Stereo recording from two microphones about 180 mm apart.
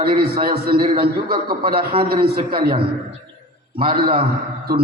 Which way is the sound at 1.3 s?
30° right (ahead or behind).